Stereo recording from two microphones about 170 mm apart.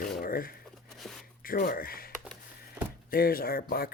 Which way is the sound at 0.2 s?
60° left (ahead or behind).